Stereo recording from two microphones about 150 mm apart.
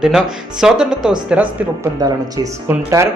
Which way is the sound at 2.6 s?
20° right (ahead or behind).